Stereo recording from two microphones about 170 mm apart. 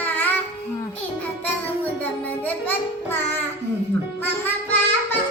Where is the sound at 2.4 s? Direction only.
10° left (ahead or behind).